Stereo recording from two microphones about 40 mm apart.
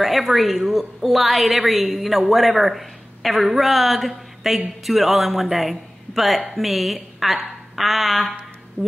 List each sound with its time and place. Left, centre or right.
0.0 s a woman's voice: centre
8.8 s speech: left